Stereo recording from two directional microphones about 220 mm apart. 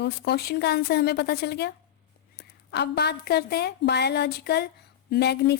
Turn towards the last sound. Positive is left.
turn(degrees=50)  # may be behind; listen again after turning